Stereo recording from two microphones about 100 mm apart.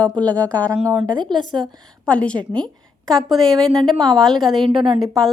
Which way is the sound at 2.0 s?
10° left (ahead or behind).